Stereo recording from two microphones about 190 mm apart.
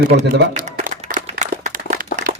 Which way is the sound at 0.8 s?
40° right (ahead or behind).